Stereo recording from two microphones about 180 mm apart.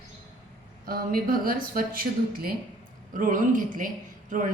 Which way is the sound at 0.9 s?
55° right (ahead or behind).